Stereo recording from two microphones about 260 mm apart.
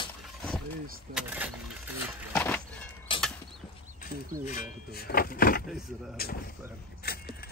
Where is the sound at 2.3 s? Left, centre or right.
Centre.